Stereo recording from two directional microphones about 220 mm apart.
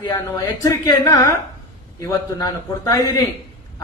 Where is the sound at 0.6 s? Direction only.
15° left (ahead or behind).